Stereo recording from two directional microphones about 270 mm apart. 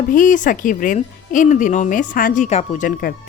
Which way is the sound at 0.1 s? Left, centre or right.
Left.